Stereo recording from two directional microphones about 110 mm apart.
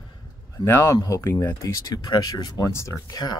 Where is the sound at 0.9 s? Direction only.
30° left (ahead or behind).